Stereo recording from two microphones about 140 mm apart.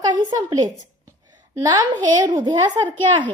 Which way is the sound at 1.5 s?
30° right (ahead or behind).